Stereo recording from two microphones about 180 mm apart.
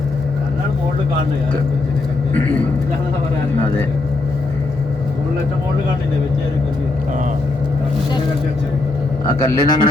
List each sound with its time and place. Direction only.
9.4 s a man's voice: 25° left (ahead or behind)